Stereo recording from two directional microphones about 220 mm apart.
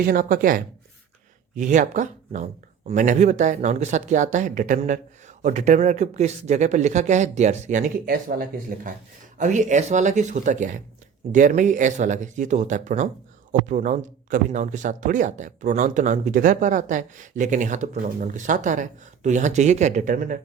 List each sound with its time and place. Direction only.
0.0 s speech: 40° right (ahead or behind)